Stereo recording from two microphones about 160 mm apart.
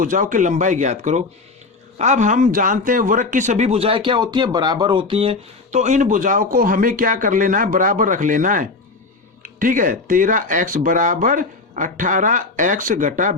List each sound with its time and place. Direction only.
0.0 s a man's voice: 55° right (ahead or behind)